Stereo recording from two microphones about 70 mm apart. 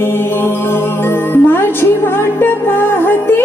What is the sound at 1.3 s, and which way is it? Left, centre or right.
Music, left.